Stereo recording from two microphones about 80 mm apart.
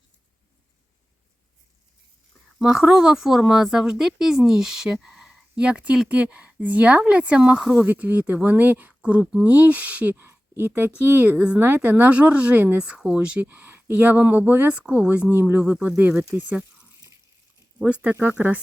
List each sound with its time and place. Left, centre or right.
2.6 s speech: centre
5.5 s speech: centre
18.0 s speech: right